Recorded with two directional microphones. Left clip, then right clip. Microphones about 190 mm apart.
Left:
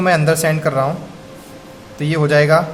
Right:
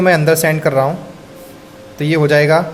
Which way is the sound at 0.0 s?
25° right (ahead or behind).